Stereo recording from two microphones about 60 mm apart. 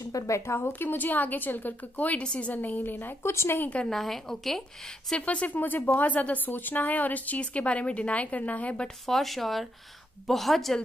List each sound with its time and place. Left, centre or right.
0.0 s speech: left
0.7 s a woman's voice: left
3.2 s speech: left
3.9 s a woman's voice: centre
5.1 s a woman's voice: left
5.6 s a woman's voice: left
9.0 s a woman's voice: centre